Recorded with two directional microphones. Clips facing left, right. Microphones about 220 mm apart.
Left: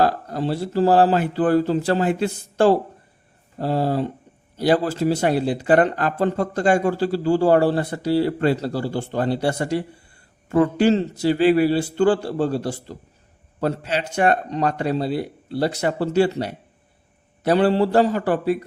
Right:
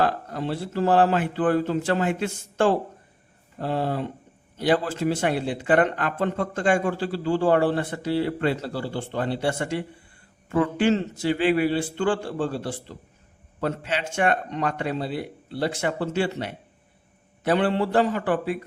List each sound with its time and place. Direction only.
0.0 s speech: 35° left (ahead or behind)